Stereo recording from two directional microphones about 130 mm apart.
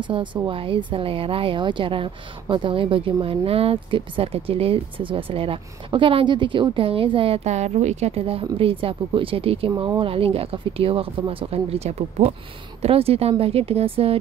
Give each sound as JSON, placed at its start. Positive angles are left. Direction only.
{"t": 0.0, "sound": "a woman's voice", "side_deg": -40}